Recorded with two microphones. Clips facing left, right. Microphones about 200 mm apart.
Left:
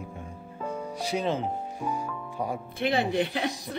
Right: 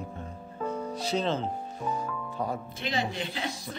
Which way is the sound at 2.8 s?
60° left (ahead or behind).